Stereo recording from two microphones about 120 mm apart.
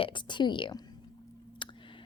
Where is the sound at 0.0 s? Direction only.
40° left (ahead or behind).